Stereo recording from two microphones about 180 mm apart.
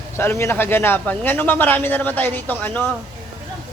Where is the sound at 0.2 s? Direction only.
15° left (ahead or behind).